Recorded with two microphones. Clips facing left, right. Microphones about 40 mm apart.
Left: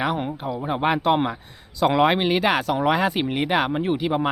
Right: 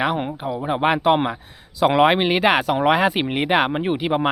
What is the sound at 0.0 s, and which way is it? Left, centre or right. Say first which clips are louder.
Speech: right 2 dB; centre.